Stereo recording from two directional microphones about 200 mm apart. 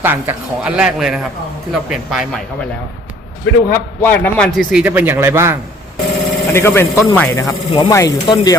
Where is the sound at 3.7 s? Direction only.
10° left (ahead or behind); by 5.6 s 15° right (ahead or behind).